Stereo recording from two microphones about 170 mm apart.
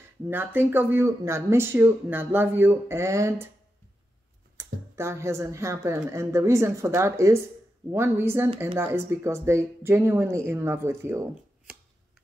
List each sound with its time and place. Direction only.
0.3 s speech: 10° right (ahead or behind)
4.6 s speech: 15° right (ahead or behind)